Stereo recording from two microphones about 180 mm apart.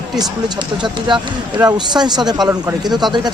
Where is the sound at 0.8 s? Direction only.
25° right (ahead or behind).